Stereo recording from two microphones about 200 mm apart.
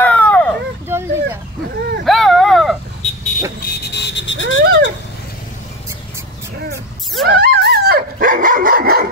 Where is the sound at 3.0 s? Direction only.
35° left (ahead or behind).